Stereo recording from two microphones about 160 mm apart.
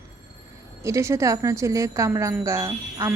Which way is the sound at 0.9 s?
20° right (ahead or behind).